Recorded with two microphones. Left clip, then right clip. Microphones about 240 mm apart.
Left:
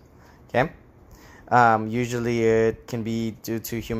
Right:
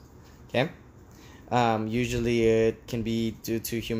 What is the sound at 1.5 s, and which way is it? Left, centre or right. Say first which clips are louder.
Speech: left 7 dB; centre.